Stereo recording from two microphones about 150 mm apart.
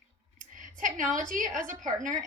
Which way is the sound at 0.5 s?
60° right (ahead or behind).